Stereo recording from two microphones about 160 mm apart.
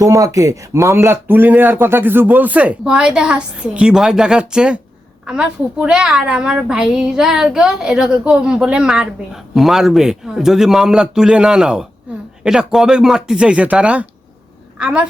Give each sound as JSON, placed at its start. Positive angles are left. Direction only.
{"t": 0.0, "sound": "a woman's voice", "side_deg": -20}